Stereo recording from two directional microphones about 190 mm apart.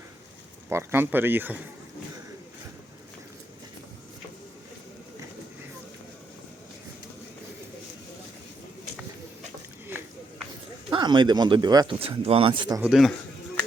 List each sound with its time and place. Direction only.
0.7 s speech: 15° right (ahead or behind)
10.8 s speech: 25° right (ahead or behind)
12.8 s speech: centre (ahead or behind)